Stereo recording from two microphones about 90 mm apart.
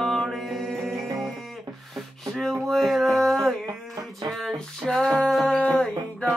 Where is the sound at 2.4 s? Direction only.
5° left (ahead or behind).